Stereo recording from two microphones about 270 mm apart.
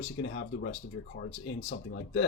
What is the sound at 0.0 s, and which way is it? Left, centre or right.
Speech, left.